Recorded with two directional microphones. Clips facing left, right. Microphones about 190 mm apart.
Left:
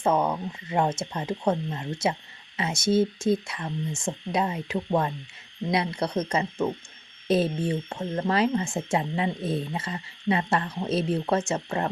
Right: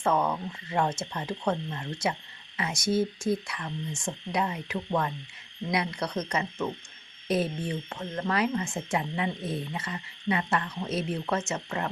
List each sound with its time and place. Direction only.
0.0 s speech: 20° left (ahead or behind)